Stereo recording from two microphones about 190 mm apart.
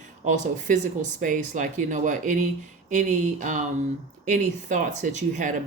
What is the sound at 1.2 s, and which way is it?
Speech, 45° right (ahead or behind).